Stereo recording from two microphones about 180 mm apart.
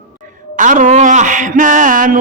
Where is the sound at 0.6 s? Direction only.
45° right (ahead or behind).